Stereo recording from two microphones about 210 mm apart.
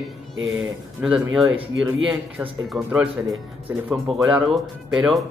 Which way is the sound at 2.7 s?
5° right (ahead or behind).